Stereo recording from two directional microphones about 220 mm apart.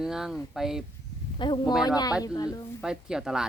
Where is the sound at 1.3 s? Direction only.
20° left (ahead or behind).